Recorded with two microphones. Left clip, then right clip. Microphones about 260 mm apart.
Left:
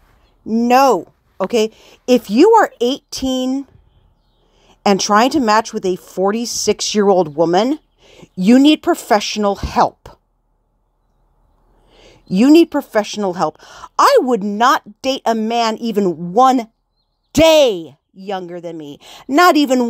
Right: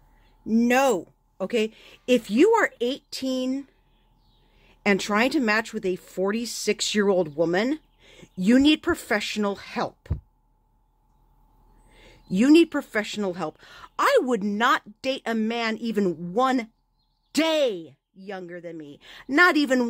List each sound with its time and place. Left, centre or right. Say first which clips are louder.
0.5 s speech: left 9 dB; centre
11.9 s speech: left 8 dB; centre